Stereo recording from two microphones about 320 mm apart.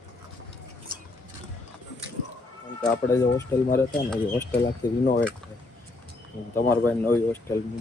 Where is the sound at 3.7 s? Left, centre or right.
Centre.